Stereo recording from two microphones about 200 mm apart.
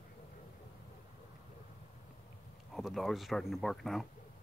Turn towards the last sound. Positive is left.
turn(degrees=0)  # may be behind; listen again after turning